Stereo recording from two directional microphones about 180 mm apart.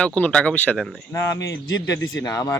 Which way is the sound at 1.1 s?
20° left (ahead or behind).